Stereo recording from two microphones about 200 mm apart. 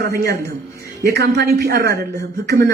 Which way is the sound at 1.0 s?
55° right (ahead or behind).